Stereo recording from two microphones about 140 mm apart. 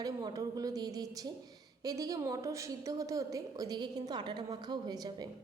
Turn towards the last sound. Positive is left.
turn(degrees=-30)  # may be behind; listen again after turning